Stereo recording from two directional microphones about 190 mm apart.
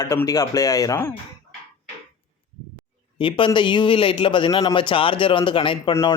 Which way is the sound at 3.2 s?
25° left (ahead or behind).